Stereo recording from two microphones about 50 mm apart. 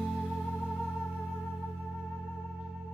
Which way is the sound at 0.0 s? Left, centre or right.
Centre.